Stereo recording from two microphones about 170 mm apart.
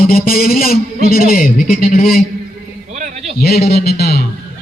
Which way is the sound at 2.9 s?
45° right (ahead or behind).